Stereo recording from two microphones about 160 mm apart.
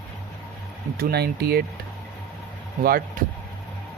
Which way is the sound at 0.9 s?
75° right (ahead or behind).